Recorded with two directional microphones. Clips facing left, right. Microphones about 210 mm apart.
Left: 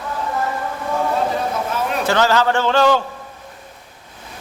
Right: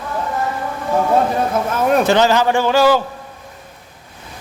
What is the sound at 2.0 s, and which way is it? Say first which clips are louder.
Speech: right 3 dB; 20° right (ahead or behind).